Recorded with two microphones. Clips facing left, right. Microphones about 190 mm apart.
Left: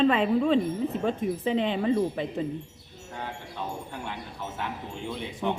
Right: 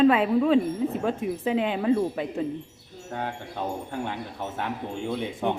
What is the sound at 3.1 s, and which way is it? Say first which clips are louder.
Speech: right 5 dB; 50° right (ahead or behind).